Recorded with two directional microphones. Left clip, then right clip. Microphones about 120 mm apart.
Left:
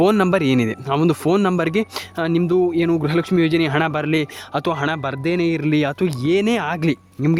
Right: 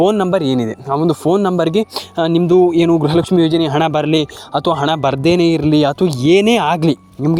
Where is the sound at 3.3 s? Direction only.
15° right (ahead or behind).